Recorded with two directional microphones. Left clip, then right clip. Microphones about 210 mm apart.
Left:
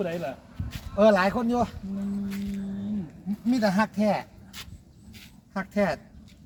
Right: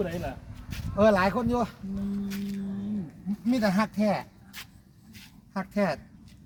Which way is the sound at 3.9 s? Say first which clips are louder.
Left 2 dB; 15° right (ahead or behind).